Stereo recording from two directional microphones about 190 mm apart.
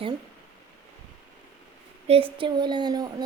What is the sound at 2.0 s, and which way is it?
A woman's voice, 30° right (ahead or behind).